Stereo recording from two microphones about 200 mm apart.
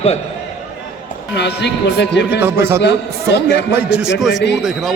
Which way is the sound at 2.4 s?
10° right (ahead or behind).